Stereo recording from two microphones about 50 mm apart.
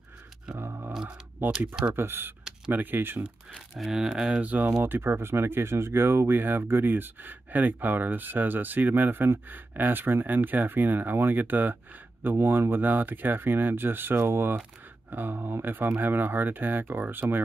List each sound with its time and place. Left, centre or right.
0.6 s a sound: right
1.4 s speech: right
2.0 s speech: right
2.7 s speech: right
3.7 s speech: centre
4.4 s speech: right
4.8 s speech: right